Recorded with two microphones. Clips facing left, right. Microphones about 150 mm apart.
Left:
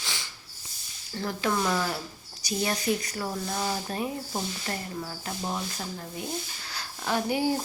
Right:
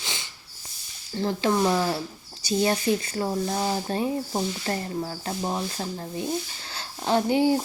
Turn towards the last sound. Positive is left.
turn(degrees=-25)  # may be behind; listen again after turning